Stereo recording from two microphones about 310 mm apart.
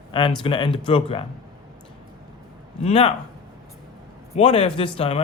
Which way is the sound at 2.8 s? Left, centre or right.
Left.